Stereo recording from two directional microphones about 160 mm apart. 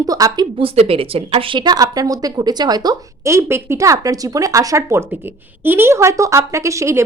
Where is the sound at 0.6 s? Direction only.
35° right (ahead or behind).